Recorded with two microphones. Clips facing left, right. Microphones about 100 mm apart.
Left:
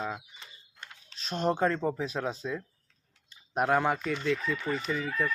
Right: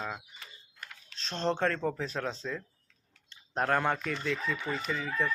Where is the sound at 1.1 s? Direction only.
10° left (ahead or behind).